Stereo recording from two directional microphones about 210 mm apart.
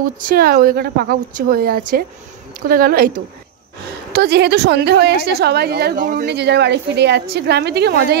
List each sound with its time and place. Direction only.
0.0 s a woman's voice: 45° right (ahead or behind)
4.1 s a woman's voice: 50° right (ahead or behind)